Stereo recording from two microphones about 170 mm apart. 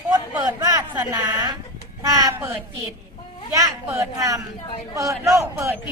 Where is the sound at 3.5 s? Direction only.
20° right (ahead or behind).